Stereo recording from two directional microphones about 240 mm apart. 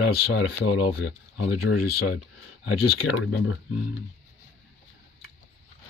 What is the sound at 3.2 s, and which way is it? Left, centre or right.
Speech, left.